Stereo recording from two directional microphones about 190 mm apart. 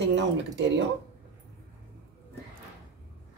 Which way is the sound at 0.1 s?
70° right (ahead or behind).